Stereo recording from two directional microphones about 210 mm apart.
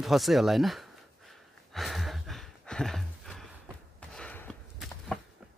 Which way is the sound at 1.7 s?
Centre (ahead or behind).